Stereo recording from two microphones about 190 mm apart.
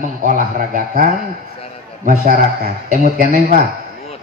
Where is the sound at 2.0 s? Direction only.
50° right (ahead or behind).